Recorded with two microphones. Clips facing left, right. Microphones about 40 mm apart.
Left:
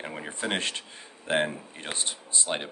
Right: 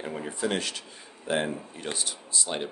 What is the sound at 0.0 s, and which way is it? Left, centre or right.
Speech, left.